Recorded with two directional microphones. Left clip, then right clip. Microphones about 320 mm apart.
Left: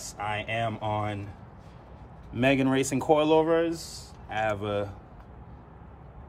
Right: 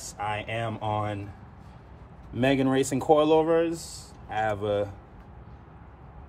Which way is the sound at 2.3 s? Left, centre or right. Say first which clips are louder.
Even; centre.